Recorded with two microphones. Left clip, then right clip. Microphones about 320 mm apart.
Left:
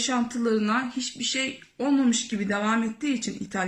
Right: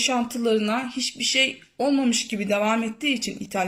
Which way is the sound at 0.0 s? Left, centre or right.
Centre.